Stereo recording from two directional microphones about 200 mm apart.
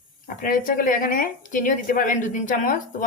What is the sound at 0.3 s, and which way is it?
A woman's voice, 45° left (ahead or behind).